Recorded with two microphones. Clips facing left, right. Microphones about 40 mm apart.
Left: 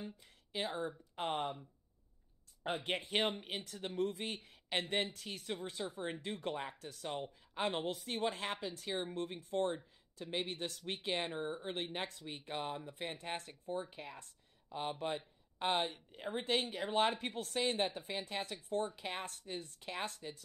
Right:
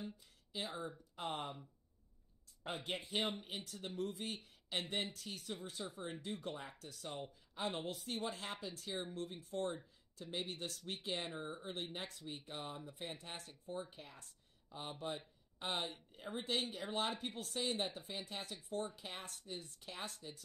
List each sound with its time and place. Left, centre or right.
0.2 s a sound: left
0.7 s speech: left
1.1 s speech: left
2.6 s speech: left